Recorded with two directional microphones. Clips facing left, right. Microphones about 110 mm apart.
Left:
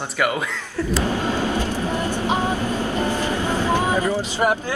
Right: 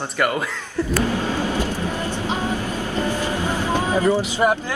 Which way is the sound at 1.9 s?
15° left (ahead or behind).